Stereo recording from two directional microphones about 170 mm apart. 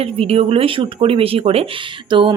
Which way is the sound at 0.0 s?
35° right (ahead or behind).